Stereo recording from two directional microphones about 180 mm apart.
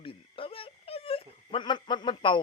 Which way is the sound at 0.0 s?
30° left (ahead or behind).